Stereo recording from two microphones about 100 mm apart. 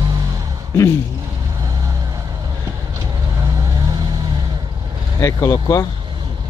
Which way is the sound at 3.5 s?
40° right (ahead or behind).